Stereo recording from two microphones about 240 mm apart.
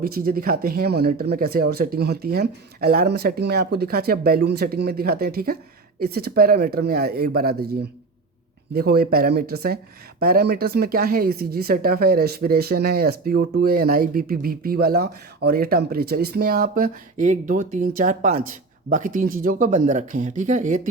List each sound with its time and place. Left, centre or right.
0.0 s speech: right